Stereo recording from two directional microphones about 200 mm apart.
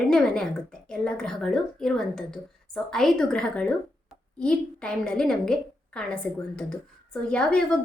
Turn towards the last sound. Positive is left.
turn(degrees=5)  # may be behind; listen again after turning